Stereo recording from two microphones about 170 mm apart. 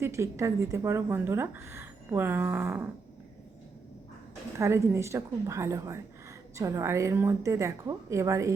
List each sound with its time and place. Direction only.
0.0 s a woman's voice: 15° right (ahead or behind)
4.5 s a woman's voice: 15° right (ahead or behind)